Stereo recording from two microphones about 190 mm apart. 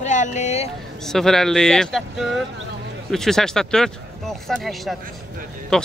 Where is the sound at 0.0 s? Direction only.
40° left (ahead or behind).